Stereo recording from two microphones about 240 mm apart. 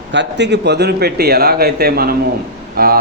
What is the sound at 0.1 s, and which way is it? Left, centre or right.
Speech, right.